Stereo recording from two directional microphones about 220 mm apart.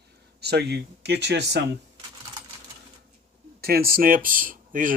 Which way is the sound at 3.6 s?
45° right (ahead or behind).